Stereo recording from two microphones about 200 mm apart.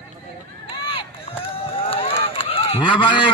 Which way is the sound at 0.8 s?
25° left (ahead or behind).